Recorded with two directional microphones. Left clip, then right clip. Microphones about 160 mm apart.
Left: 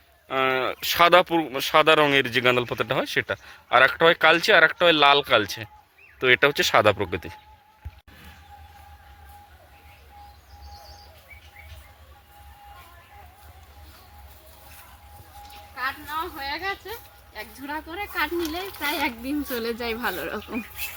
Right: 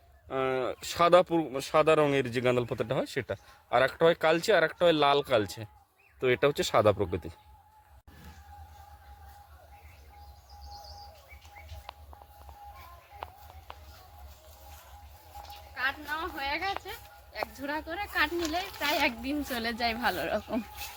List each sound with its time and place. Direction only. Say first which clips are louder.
0.3 s speech: left 7 dB; centre (ahead or behind)
17.3 s speech: left 1 dB; 30° right (ahead or behind)